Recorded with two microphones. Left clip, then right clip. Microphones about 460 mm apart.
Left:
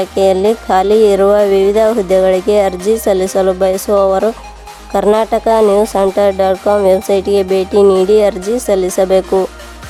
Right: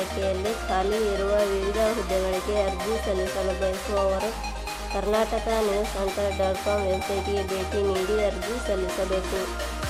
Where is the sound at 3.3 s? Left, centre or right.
Left.